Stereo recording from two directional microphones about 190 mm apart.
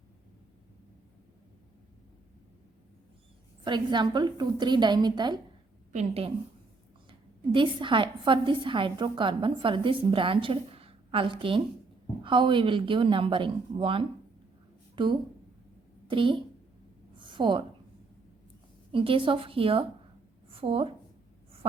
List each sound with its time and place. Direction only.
3.6 s a woman's voice: 25° right (ahead or behind)
5.9 s a woman's voice: 35° right (ahead or behind)
17.2 s a sound: 25° right (ahead or behind)
18.9 s a woman's voice: 30° right (ahead or behind)